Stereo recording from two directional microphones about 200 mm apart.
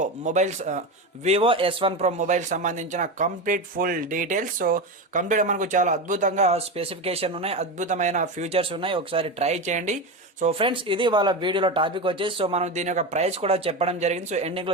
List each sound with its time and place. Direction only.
0.0 s speech: 35° right (ahead or behind)
10.4 s speech: 25° right (ahead or behind)